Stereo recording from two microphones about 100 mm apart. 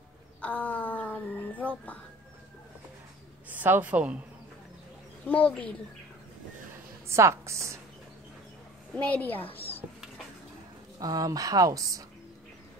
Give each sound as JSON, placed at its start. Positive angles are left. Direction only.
{"t": 0.4, "sound": "a sound", "side_deg": 15}
{"t": 3.4, "sound": "a man's voice", "side_deg": -20}
{"t": 5.3, "sound": "a woman's voice", "side_deg": 15}
{"t": 7.1, "sound": "speech", "side_deg": -30}
{"t": 8.9, "sound": "a woman's voice", "side_deg": 15}
{"t": 11.0, "sound": "speech", "side_deg": -35}